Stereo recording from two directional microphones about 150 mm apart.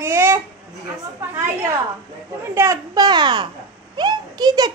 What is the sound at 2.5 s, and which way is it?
Speech, 20° right (ahead or behind).